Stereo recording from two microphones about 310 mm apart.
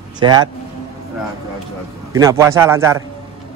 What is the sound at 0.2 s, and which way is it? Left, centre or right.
Speech, centre.